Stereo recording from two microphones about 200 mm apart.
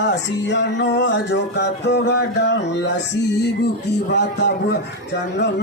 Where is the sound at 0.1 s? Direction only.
60° left (ahead or behind).